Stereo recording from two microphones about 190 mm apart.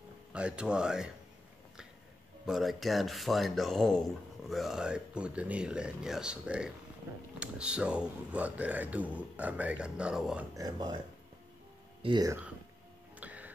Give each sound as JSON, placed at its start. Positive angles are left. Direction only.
{"t": 0.3, "sound": "speech", "side_deg": -5}
{"t": 2.4, "sound": "speech", "side_deg": 0}
{"t": 10.5, "sound": "speech", "side_deg": -20}
{"t": 12.0, "sound": "speech", "side_deg": -20}
{"t": 13.2, "sound": "music", "side_deg": -10}